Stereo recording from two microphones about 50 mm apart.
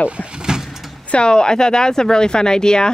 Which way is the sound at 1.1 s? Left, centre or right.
Centre.